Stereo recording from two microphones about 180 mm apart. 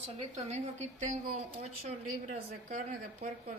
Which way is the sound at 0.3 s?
40° right (ahead or behind).